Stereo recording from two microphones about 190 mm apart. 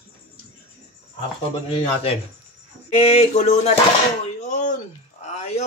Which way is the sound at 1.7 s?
30° left (ahead or behind).